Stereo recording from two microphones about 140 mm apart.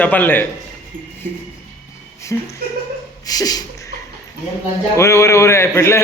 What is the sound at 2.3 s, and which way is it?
Speech, 15° left (ahead or behind).